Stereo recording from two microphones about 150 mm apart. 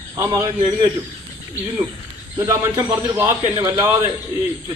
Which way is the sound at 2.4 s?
25° right (ahead or behind).